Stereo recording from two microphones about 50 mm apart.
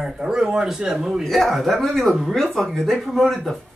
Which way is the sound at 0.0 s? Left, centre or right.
Centre.